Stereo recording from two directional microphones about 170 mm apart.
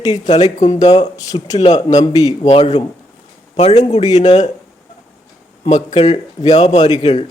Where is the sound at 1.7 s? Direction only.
45° left (ahead or behind).